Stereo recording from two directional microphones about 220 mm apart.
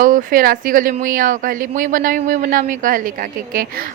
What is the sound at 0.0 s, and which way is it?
Speech, 40° right (ahead or behind).